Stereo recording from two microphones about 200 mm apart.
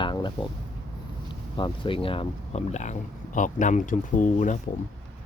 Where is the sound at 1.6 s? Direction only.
25° left (ahead or behind); by 4.5 s 40° left (ahead or behind).